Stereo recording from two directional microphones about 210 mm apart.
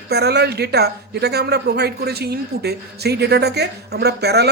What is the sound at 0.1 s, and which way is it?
Speech, 50° right (ahead or behind).